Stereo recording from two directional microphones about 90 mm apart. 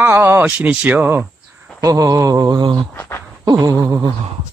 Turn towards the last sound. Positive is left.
turn(degrees=-40)  # may be behind; listen again after turning